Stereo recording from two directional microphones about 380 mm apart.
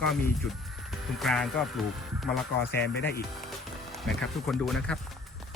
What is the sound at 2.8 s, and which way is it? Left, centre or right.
Speech, left.